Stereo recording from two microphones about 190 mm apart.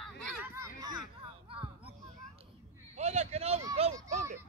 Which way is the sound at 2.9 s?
35° right (ahead or behind).